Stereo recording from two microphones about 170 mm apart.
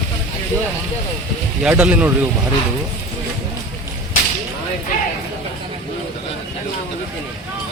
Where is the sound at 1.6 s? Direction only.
10° right (ahead or behind).